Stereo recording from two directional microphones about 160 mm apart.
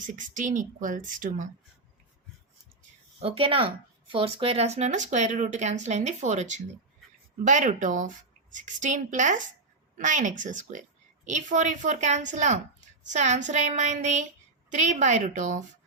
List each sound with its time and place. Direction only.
0.0 s speech: 55° right (ahead or behind)
3.2 s speech: 35° right (ahead or behind)